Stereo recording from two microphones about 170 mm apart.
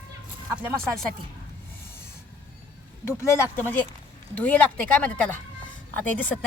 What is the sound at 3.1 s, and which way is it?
Speech, 15° left (ahead or behind).